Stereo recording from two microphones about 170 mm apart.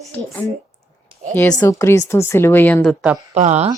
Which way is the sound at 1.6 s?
15° left (ahead or behind).